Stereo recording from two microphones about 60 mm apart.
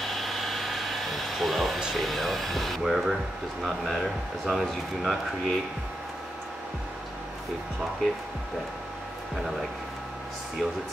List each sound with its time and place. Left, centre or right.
0.0 s a sound: centre
2.0 s speech: centre
10.6 s speech: centre